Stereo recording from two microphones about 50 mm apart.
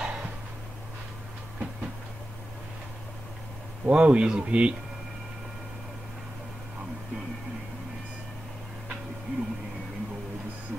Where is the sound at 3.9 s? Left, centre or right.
Right.